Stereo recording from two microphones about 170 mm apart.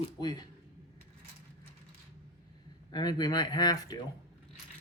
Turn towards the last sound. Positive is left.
turn(degrees=25)  # may be behind; listen again after turning